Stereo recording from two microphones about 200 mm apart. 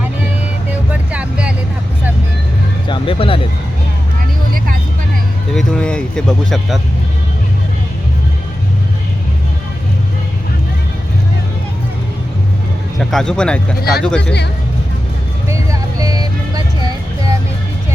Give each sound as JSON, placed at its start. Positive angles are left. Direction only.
{"t": 1.1, "sound": "vehicle", "side_deg": -5}
{"t": 2.9, "sound": "speech", "side_deg": 25}
{"t": 5.5, "sound": "speech", "side_deg": 5}
{"t": 13.0, "sound": "speech", "side_deg": 0}
{"t": 15.4, "sound": "vehicle", "side_deg": -15}